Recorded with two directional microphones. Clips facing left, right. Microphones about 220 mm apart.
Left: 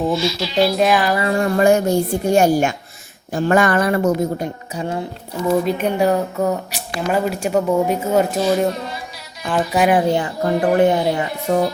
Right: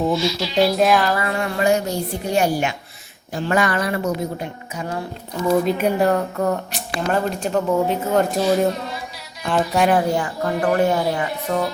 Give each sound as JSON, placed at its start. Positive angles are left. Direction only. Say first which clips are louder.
{"t": 0.0, "sound": "speech", "louder": "left 1 dB", "side_deg": 5}
{"t": 1.1, "sound": "speech", "louder": "left 4 dB", "side_deg": 25}
{"t": 1.4, "sound": "a woman's voice", "louder": "left 6 dB", "side_deg": 45}
{"t": 4.7, "sound": "speech", "louder": "left 2 dB", "side_deg": 30}
{"t": 5.5, "sound": "speech", "louder": "even", "side_deg": -5}
{"t": 9.9, "sound": "speech", "louder": "left 2 dB", "side_deg": 20}